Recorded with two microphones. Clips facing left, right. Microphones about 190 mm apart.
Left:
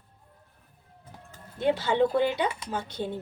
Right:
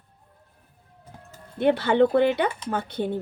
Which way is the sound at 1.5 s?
65° right (ahead or behind).